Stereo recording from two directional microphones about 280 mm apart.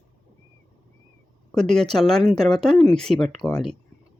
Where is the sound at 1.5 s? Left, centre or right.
Centre.